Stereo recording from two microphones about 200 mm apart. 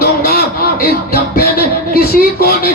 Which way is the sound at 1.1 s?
50° left (ahead or behind).